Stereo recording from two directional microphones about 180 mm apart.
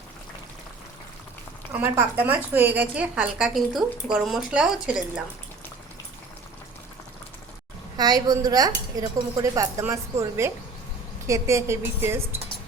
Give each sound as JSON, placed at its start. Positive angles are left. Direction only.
{"t": 1.7, "sound": "a woman's voice", "side_deg": -10}
{"t": 7.9, "sound": "a woman's voice", "side_deg": -20}